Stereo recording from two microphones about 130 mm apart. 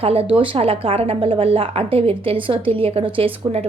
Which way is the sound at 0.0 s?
45° right (ahead or behind).